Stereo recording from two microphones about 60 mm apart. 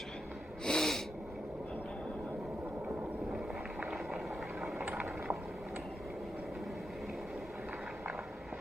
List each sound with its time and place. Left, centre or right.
0.6 s snort: centre